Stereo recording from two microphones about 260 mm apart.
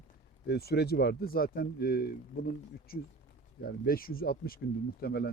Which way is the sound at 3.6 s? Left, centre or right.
Left.